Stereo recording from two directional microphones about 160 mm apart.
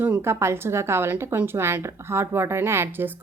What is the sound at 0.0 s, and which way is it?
Speech, 15° right (ahead or behind).